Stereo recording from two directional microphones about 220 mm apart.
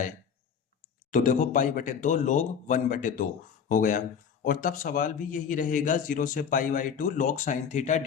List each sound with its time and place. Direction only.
1.1 s a man's voice: 35° left (ahead or behind)